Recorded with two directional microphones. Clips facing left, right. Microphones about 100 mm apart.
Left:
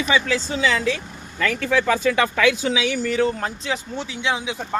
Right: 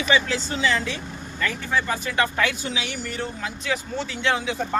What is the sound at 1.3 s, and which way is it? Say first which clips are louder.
Speech: left 5 dB; 85° left.